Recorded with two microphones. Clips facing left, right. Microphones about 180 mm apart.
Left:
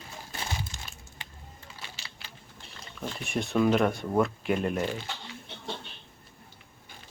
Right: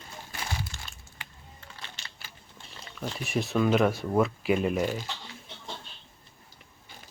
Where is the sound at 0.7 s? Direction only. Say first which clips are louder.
Even; 20° left (ahead or behind).